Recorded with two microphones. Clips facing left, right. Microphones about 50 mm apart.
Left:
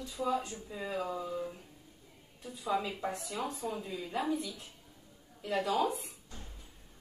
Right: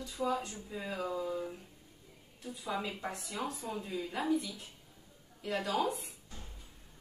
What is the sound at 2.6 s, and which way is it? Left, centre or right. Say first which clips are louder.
Speech: left 4 dB; centre.